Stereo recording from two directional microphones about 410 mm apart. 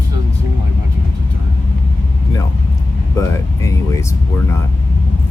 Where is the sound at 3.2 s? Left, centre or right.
Centre.